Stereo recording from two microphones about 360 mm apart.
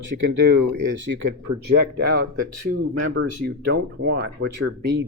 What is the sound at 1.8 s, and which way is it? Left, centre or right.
Speech, right.